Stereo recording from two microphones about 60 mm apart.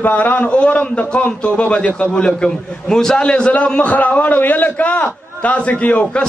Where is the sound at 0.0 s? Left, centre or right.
Left.